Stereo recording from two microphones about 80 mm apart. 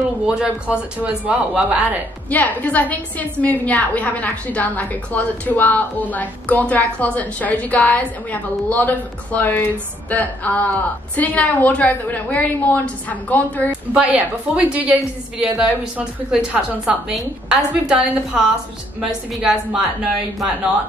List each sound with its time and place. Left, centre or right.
0.3 s a woman's voice: centre
2.2 s a woman's voice: centre
13.9 s a woman's voice: centre